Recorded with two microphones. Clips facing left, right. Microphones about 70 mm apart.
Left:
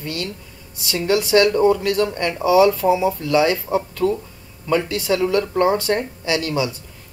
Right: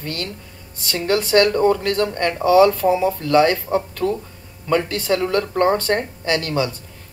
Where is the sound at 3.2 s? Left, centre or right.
Right.